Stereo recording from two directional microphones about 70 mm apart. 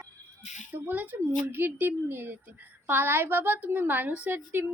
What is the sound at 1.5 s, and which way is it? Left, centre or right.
A woman's voice, right.